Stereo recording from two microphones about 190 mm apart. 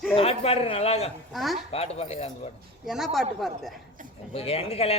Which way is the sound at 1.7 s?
35° left (ahead or behind).